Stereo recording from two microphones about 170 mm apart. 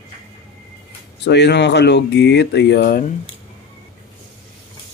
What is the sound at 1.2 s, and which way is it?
Speech, 85° left.